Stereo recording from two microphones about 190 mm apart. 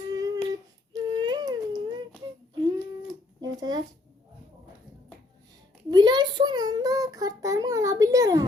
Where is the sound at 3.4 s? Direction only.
20° right (ahead or behind).